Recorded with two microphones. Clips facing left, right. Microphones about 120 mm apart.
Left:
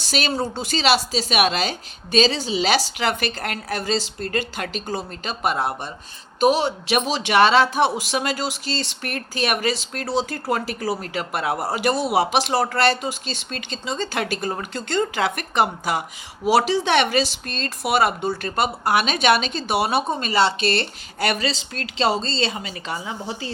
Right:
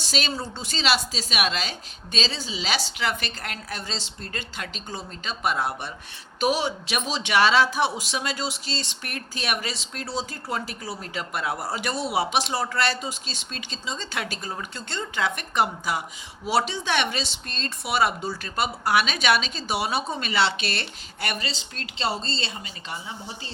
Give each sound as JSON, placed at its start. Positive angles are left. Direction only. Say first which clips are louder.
{"t": 0.0, "sound": "speech", "louder": "left 5 dB", "side_deg": 65}
{"t": 2.1, "sound": "speech", "louder": "left 10 dB", "side_deg": 70}
{"t": 5.3, "sound": "speech", "louder": "left 3 dB", "side_deg": 50}
{"t": 10.9, "sound": "speech", "louder": "left 5 dB", "side_deg": 55}
{"t": 21.2, "sound": "a woman's voice", "louder": "left 8 dB", "side_deg": 85}